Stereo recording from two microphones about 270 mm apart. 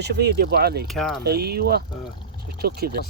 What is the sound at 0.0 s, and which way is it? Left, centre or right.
Speech, right.